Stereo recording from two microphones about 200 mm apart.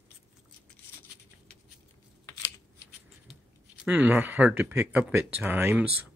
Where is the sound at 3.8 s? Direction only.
5° right (ahead or behind).